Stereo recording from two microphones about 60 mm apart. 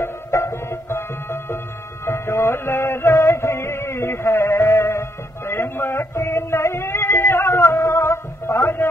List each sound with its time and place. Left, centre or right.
0.0 s music: left